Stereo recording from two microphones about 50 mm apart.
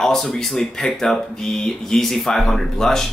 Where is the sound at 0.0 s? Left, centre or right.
Centre.